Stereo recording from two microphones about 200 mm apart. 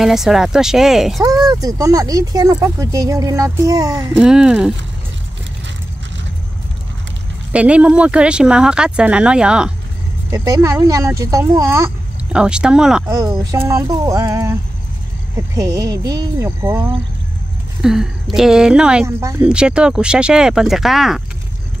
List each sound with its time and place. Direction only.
0.0 s speech: centre (ahead or behind)
1.2 s speech: 20° right (ahead or behind)
4.2 s speech: 5° right (ahead or behind)
7.5 s speech: 5° right (ahead or behind)
10.3 s speech: 15° right (ahead or behind)
13.1 s speech: 15° right (ahead or behind)
19.0 s speech: 15° right (ahead or behind)